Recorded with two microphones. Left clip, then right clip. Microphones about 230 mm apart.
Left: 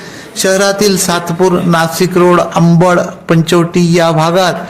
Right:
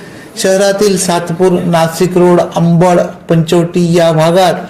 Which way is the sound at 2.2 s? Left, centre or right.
Left.